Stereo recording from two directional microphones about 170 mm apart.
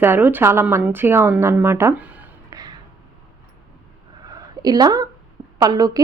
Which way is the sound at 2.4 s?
20° right (ahead or behind).